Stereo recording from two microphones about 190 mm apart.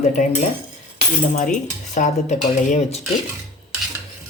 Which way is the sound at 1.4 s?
40° left (ahead or behind).